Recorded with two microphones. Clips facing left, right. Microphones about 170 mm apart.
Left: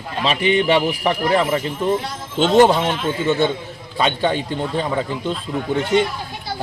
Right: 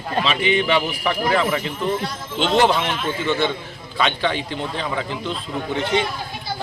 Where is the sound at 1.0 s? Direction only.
40° left (ahead or behind).